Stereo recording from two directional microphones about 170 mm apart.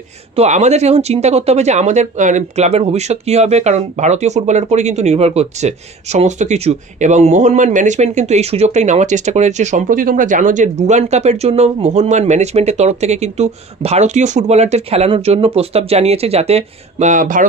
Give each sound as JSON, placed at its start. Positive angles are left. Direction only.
{"t": 0.4, "sound": "speech", "side_deg": -40}